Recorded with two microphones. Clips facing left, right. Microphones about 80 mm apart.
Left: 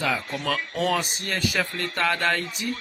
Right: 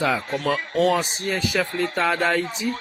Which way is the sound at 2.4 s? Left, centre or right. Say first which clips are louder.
Right 4 dB; right.